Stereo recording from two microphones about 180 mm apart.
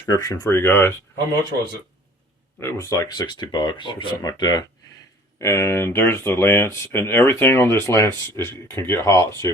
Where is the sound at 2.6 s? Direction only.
15° left (ahead or behind).